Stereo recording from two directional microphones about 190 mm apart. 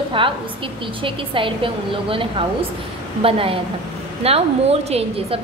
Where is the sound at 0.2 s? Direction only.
25° right (ahead or behind).